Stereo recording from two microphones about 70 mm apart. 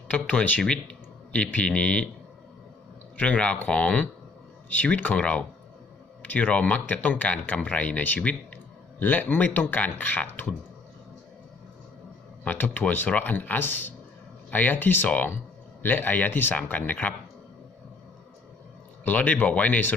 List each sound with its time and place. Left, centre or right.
0.1 s speech: left
3.2 s speech: centre
12.5 s speech: left
19.0 s speech: left